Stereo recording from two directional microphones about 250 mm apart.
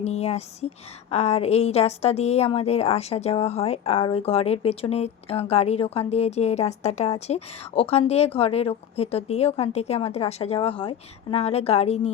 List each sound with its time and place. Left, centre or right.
0.0 s a woman's voice: left